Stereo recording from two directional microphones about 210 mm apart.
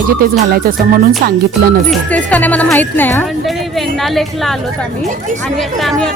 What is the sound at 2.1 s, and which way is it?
A woman's voice, 5° left (ahead or behind).